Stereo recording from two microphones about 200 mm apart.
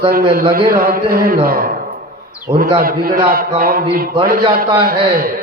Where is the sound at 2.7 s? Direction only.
45° right (ahead or behind).